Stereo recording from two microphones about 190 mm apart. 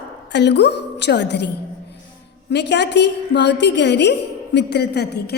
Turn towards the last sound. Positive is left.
turn(degrees=60)  # may be behind; listen again after turning